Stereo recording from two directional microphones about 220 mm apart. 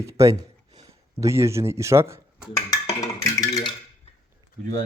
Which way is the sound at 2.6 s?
15° left (ahead or behind).